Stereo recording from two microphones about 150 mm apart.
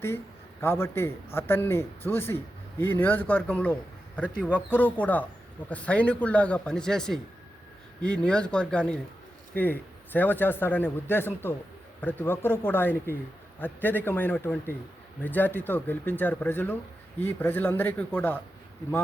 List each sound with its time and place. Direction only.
0.6 s a man's voice: 15° left (ahead or behind)